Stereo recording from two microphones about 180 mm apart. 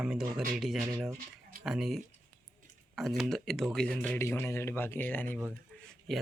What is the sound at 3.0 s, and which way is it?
Speech, centre (ahead or behind).